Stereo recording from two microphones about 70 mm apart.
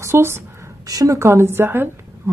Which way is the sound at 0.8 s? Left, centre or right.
Right.